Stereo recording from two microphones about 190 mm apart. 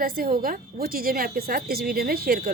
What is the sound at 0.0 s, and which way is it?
A woman's voice, 50° right (ahead or behind).